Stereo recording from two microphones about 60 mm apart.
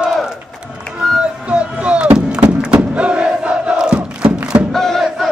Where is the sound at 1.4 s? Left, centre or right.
Centre.